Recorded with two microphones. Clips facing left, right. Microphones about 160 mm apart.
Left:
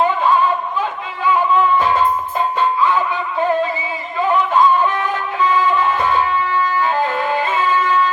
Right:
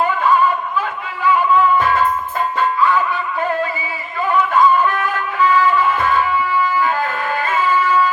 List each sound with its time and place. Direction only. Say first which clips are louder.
0.0 s a sound: left 1 dB; 20° left (ahead or behind)
2.6 s music: right 1 dB; 20° left (ahead or behind)
4.5 s music: right 1 dB; 20° left (ahead or behind)
7.3 s music: right 3 dB; 20° left (ahead or behind)